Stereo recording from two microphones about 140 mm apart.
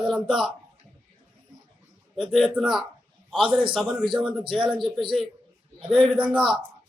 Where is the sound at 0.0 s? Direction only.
5° right (ahead or behind).